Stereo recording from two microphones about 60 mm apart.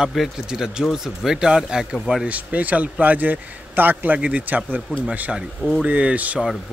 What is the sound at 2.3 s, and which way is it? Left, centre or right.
A man's voice, right.